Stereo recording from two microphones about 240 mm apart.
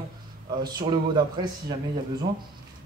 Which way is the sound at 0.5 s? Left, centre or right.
Centre.